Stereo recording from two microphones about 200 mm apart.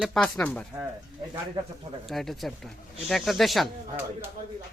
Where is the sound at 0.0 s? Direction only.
5° left (ahead or behind).